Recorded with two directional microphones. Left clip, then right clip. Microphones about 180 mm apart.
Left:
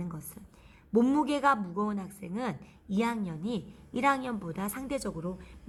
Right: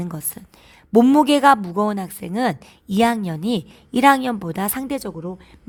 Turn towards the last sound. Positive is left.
turn(degrees=-35)  # may be behind; listen again after turning